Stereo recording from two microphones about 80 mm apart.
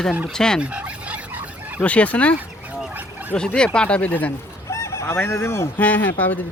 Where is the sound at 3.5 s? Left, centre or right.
Centre.